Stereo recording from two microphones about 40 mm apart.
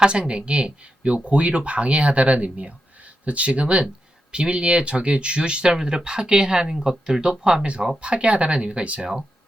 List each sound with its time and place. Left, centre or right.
0.0 s speech: right
9.0 s speech: centre